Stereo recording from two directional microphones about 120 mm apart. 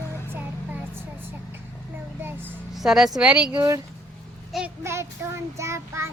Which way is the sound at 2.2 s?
15° right (ahead or behind).